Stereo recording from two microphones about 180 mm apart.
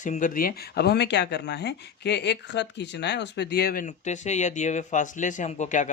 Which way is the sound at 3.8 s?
40° left (ahead or behind).